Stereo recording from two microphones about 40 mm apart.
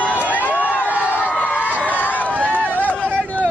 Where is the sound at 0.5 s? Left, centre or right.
Right.